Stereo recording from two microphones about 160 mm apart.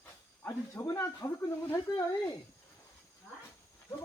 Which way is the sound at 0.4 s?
20° left (ahead or behind).